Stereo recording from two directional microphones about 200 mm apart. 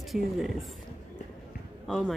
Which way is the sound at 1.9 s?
Centre (ahead or behind).